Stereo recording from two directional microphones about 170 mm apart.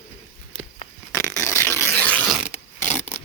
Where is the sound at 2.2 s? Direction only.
5° right (ahead or behind).